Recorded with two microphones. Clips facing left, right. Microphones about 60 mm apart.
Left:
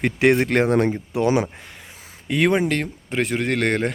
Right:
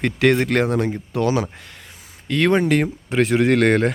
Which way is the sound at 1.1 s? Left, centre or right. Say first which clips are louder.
Even; left.